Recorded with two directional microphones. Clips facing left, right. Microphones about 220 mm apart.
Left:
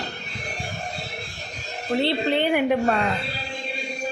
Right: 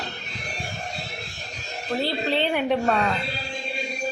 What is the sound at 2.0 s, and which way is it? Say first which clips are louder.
Speech: left 3 dB; 20° left (ahead or behind).